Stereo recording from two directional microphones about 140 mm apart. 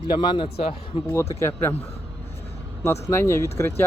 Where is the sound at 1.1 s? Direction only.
20° left (ahead or behind).